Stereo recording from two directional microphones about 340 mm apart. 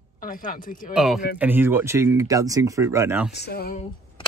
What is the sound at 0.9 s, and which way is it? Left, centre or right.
Speech, centre.